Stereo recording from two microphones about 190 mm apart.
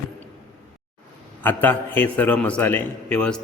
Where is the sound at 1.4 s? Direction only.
10° left (ahead or behind).